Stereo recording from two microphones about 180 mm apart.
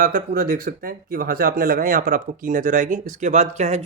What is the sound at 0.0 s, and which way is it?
Speech, 55° right (ahead or behind).